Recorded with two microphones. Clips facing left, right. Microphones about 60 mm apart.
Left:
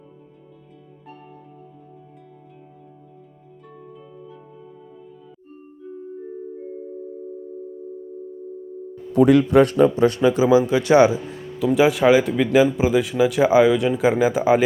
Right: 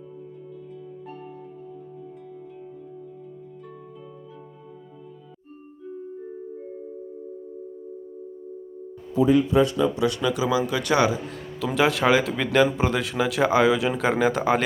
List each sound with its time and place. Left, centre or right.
0.9 s music: centre
5.8 s music: centre
9.1 s a man's voice: left
9.9 s speech: left
11.6 s speech: centre